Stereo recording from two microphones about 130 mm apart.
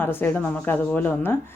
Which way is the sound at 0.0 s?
15° left (ahead or behind).